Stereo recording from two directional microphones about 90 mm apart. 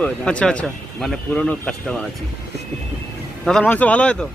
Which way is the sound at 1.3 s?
15° left (ahead or behind).